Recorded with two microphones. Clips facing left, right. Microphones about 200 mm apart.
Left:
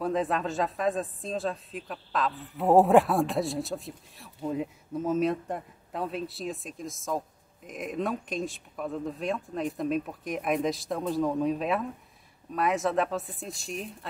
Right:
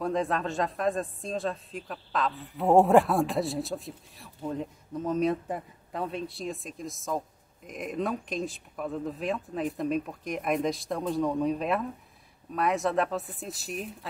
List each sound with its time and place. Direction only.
0.0 s speech: centre (ahead or behind)